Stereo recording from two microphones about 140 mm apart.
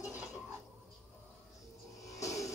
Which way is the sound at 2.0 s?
25° left (ahead or behind).